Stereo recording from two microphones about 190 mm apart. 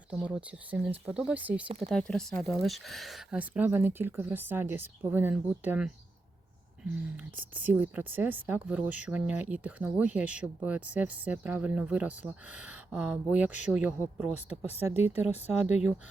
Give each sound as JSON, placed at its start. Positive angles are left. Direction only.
{"t": 0.1, "sound": "a woman's voice", "side_deg": -5}
{"t": 1.6, "sound": "speech", "side_deg": -35}
{"t": 1.9, "sound": "a woman's voice", "side_deg": 5}